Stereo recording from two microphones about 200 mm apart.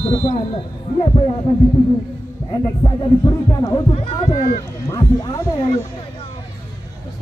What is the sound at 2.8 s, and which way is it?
Speech, 20° left (ahead or behind).